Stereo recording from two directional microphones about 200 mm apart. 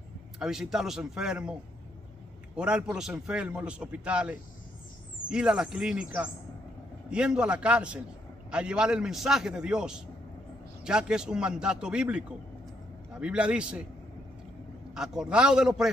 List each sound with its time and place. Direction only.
0.4 s a man's voice: centre (ahead or behind)
2.5 s a man's voice: 5° right (ahead or behind)
15.0 s a man's voice: 5° right (ahead or behind)